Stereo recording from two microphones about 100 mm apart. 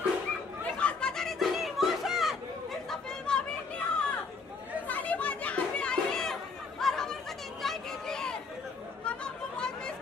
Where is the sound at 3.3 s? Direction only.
10° left (ahead or behind).